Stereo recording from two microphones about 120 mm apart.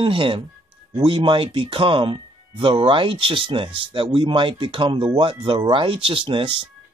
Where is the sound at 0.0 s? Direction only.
45° right (ahead or behind).